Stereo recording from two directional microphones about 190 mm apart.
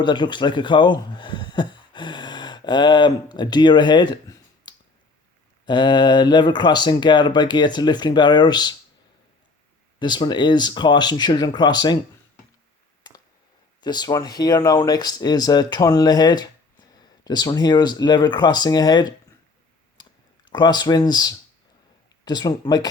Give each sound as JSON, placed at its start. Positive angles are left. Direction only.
{"t": 0.0, "sound": "speech", "side_deg": 25}
{"t": 10.0, "sound": "speech", "side_deg": 25}
{"t": 13.8, "sound": "speech", "side_deg": 20}
{"t": 20.0, "sound": "clicking", "side_deg": 25}
{"t": 22.2, "sound": "speech", "side_deg": 20}